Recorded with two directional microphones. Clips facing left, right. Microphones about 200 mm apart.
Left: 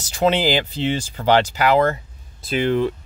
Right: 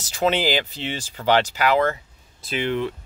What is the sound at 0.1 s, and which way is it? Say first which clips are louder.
Speech: left 3 dB; 35° left (ahead or behind).